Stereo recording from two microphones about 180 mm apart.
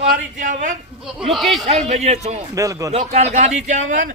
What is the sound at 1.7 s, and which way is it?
Speech, 40° right (ahead or behind).